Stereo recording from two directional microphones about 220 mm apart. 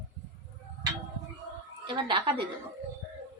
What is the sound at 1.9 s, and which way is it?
Speech, 20° right (ahead or behind).